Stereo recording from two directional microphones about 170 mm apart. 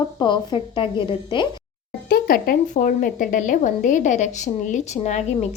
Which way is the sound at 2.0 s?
60° left (ahead or behind).